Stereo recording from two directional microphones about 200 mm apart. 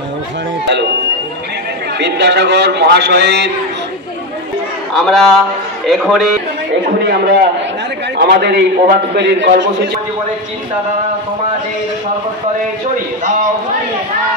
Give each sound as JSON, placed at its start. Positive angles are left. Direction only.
{"t": 2.0, "sound": "a man's voice", "side_deg": -60}
{"t": 4.9, "sound": "a man's voice", "side_deg": 0}
{"t": 7.1, "sound": "a man's voice", "side_deg": -55}